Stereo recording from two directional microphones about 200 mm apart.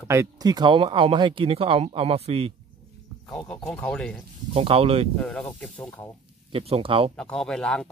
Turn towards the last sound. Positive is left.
turn(degrees=5)  # may be behind; listen again after turning